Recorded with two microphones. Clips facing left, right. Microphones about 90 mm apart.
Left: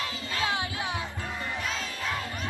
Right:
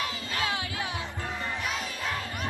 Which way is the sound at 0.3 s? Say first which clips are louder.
Left 2 dB; 25° left (ahead or behind).